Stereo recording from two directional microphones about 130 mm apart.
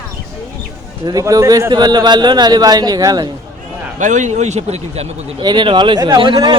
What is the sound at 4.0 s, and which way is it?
Speech, 70° right (ahead or behind).